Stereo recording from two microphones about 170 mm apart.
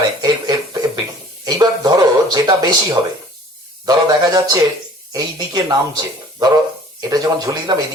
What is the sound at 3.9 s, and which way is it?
Speech, 25° right (ahead or behind).